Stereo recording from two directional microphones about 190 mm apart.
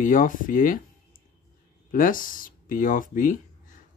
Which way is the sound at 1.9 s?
45° left (ahead or behind).